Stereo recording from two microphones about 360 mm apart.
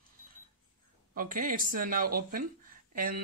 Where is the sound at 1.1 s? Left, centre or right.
Right.